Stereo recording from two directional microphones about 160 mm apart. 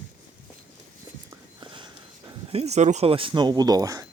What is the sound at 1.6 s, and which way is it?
Walk, 30° right (ahead or behind).